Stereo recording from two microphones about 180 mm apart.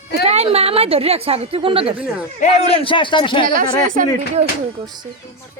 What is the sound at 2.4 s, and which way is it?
A man's voice, 30° left (ahead or behind).